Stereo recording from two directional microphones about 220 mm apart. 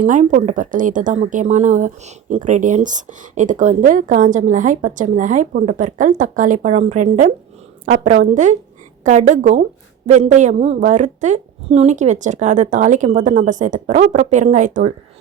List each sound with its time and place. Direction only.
0.0 s a woman's voice: 35° right (ahead or behind)